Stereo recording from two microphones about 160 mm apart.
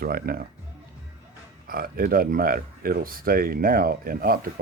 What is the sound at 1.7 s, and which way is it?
Speech, 65° right (ahead or behind).